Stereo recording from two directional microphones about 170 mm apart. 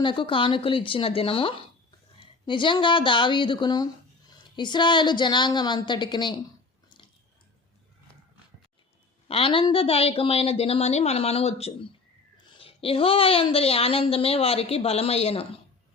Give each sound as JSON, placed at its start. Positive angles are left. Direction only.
{"t": 0.0, "sound": "a woman's voice", "side_deg": 30}
{"t": 9.2, "sound": "a woman's voice", "side_deg": 35}